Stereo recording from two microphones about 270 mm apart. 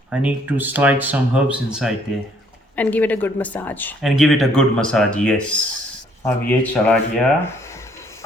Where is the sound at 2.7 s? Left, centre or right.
Centre.